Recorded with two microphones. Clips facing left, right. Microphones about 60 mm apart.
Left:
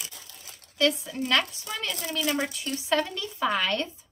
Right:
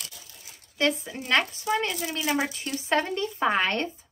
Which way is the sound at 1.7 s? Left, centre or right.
Right.